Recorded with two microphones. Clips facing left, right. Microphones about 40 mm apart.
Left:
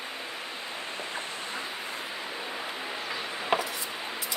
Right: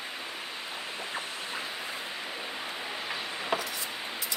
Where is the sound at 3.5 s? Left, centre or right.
Left.